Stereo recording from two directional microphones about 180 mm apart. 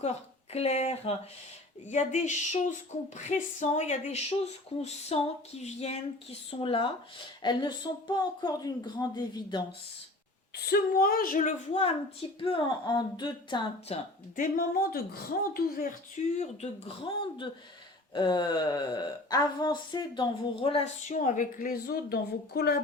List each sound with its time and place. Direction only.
0.5 s speech: 35° left (ahead or behind)
10.7 s a woman's voice: 55° left (ahead or behind); by 11.9 s 40° left (ahead or behind)
12.4 s speech: 30° left (ahead or behind)
14.3 s a woman's voice: 45° left (ahead or behind)
17.0 s speech: 25° left (ahead or behind)
21.1 s a woman's voice: 45° left (ahead or behind)